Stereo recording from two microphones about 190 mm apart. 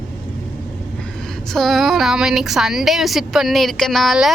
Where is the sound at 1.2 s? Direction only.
Centre (ahead or behind).